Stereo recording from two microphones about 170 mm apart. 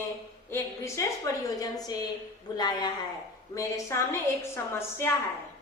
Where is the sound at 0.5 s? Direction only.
15° left (ahead or behind).